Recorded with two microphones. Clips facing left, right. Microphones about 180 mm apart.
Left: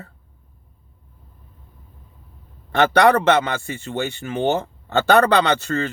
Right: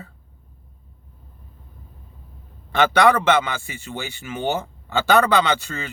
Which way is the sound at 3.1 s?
60° left (ahead or behind).